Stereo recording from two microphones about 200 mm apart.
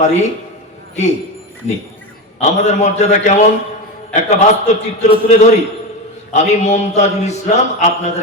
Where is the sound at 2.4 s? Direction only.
35° left (ahead or behind).